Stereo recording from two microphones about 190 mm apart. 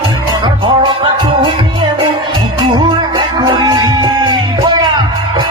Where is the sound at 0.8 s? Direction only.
25° right (ahead or behind).